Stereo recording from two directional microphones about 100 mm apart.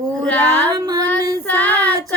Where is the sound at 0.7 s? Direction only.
40° right (ahead or behind).